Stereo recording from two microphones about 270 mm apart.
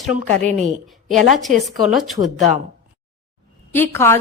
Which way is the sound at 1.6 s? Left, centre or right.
Centre.